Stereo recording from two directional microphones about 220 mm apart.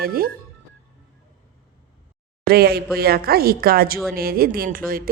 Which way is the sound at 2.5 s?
45° right (ahead or behind).